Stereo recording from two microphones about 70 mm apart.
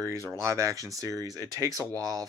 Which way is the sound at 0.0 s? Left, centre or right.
Right.